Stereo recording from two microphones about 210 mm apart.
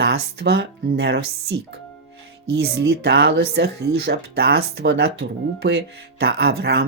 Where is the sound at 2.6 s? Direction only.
50° right (ahead or behind).